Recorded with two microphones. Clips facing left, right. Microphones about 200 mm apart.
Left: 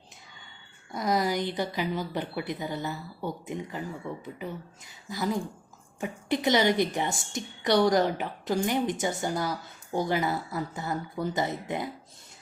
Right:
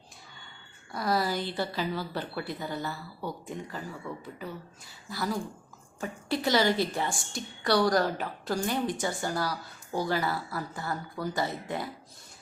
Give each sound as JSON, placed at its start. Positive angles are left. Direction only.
{"t": 0.9, "sound": "a woman's voice", "side_deg": 20}